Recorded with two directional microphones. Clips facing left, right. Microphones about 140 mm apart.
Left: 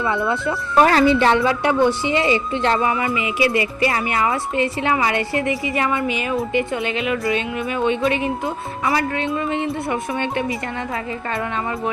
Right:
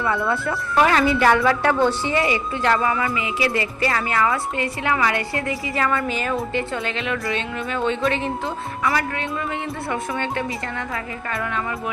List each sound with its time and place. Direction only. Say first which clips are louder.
0.8 s a woman's voice: left 3 dB; 35° left (ahead or behind); by 8.3 s 15° left (ahead or behind)
8.8 s a woman's voice: left 3 dB; 25° left (ahead or behind)